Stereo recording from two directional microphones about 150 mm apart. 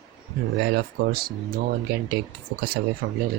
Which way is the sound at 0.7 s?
90° right.